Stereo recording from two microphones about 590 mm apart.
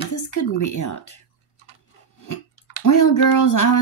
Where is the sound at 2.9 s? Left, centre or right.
Left.